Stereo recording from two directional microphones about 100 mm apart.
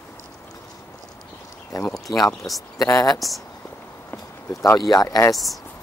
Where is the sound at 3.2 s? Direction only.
Centre (ahead or behind).